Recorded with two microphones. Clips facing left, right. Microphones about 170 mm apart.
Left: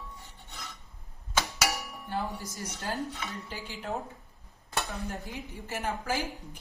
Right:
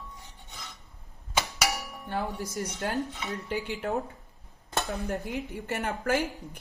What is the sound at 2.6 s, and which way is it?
A woman's voice, 65° right (ahead or behind).